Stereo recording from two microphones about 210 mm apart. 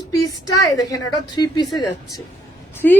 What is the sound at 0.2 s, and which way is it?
A woman's voice, 15° left (ahead or behind).